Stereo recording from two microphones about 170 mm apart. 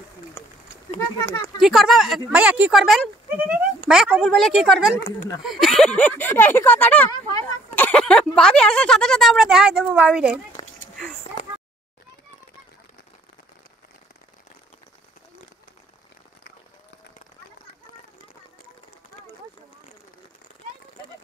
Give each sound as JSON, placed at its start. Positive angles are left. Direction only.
{"t": 0.4, "sound": "a sound", "side_deg": 15}
{"t": 1.2, "sound": "speech", "side_deg": 15}
{"t": 1.6, "sound": "speech", "side_deg": 0}
{"t": 7.1, "sound": "speech", "side_deg": 25}
{"t": 7.7, "sound": "speech", "side_deg": 10}